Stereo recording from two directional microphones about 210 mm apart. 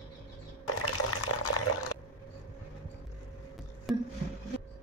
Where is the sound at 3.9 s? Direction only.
Centre (ahead or behind).